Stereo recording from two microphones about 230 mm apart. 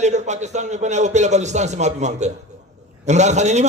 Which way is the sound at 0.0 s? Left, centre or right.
Right.